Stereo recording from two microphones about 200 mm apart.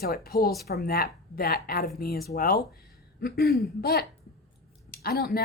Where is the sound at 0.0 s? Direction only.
50° left (ahead or behind).